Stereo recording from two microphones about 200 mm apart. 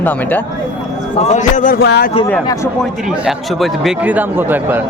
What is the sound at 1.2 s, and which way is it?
Speech, 35° left (ahead or behind).